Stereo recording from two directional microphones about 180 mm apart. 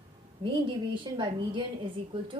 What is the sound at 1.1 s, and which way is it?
A woman's voice, 25° right (ahead or behind).